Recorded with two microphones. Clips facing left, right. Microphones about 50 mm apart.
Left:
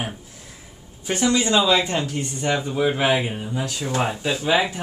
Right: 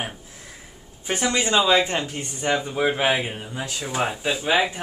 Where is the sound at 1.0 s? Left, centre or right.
Right.